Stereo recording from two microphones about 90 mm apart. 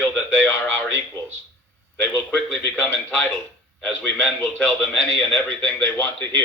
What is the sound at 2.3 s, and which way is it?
A man's voice, 15° left (ahead or behind).